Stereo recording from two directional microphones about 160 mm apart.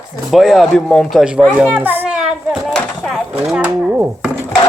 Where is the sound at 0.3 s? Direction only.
Centre (ahead or behind).